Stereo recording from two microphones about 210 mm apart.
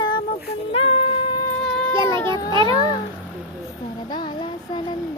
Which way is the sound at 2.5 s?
25° right (ahead or behind).